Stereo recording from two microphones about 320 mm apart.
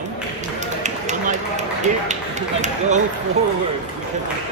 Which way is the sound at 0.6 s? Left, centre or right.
Right.